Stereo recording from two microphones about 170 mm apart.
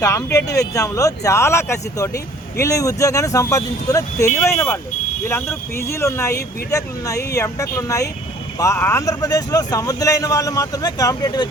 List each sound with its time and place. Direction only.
0.0 s speech: 20° left (ahead or behind)